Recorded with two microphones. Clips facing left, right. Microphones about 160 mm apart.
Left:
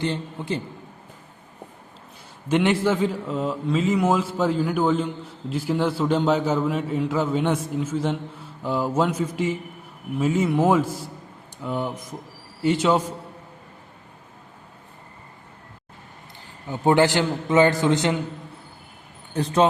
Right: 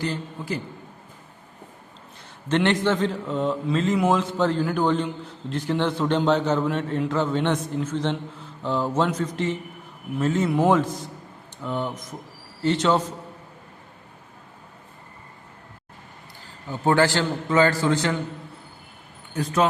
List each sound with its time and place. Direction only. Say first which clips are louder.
0.0 s a man's voice: left 2 dB; 25° left (ahead or behind)
2.5 s a man's voice: left 1 dB; 10° left (ahead or behind)
16.6 s a man's voice: left 2 dB; 20° left (ahead or behind)
19.3 s speech: left 2 dB; 25° left (ahead or behind)